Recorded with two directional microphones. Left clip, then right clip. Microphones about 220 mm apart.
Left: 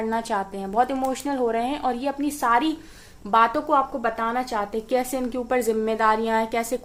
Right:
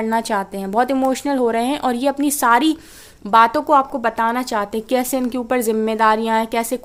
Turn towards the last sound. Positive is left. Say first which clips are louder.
# right 4 dB
turn(degrees=-35)  # may be behind; listen again after turning